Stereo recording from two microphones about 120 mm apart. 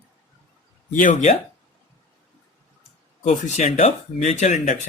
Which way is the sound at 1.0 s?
90° left.